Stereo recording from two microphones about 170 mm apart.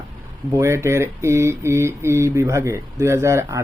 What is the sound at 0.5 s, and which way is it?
Speech, 15° right (ahead or behind).